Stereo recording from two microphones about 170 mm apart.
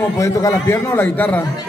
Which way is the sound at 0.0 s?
20° left (ahead or behind).